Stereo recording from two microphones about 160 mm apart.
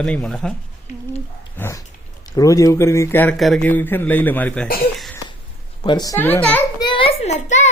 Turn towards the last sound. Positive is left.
turn(degrees=45)  # may be behind; listen again after turning